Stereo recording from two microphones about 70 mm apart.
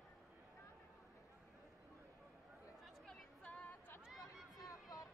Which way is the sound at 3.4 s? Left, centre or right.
Centre.